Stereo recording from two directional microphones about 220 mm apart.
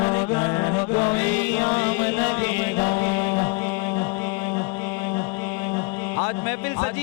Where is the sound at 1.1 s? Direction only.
10° left (ahead or behind).